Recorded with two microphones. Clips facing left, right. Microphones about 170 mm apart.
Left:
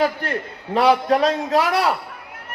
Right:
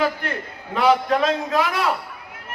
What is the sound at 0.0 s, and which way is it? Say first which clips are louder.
A man's voice: left 2 dB; 35° left (ahead or behind).